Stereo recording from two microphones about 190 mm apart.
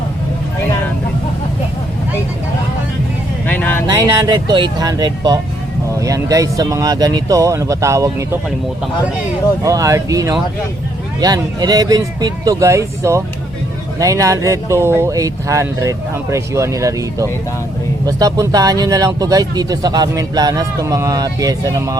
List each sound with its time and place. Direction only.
3.4 s vehicle: 10° left (ahead or behind)
3.8 s speech: 20° right (ahead or behind)
9.6 s speech: 15° right (ahead or behind)